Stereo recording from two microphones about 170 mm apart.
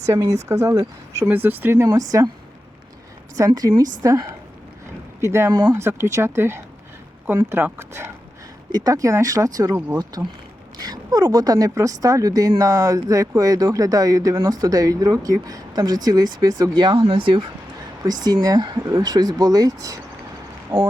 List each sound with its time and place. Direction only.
0.1 s speech: 20° right (ahead or behind)
3.3 s speech: 20° right (ahead or behind)